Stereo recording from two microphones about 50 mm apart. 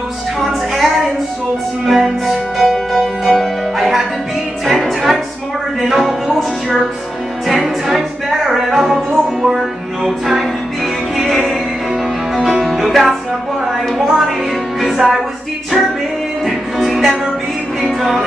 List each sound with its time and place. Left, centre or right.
0.4 s music: centre
1.9 s music: centre
12.8 s music: centre
16.4 s music: centre